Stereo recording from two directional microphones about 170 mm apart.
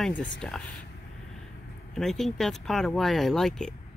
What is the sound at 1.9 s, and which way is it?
Speech, centre (ahead or behind).